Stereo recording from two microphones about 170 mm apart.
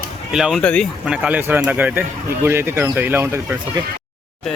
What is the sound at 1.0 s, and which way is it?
A man's voice, 5° right (ahead or behind).